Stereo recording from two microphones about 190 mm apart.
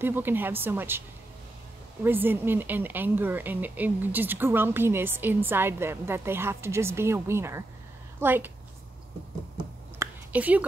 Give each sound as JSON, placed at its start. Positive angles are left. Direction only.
{"t": 0.0, "sound": "a woman's voice", "side_deg": -10}
{"t": 2.0, "sound": "a woman's voice", "side_deg": -10}
{"t": 9.9, "sound": "whispering", "side_deg": -10}